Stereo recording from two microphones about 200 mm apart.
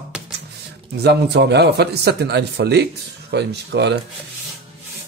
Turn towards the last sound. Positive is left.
turn(degrees=-60)  # may be behind; listen again after turning